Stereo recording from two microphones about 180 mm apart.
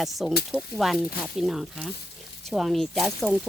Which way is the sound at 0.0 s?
Centre (ahead or behind).